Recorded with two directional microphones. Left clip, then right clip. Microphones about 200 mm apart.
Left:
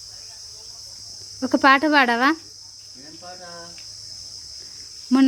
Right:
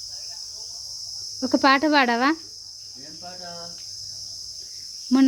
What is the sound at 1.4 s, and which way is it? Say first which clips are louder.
Speech: left 3 dB; 5° right (ahead or behind).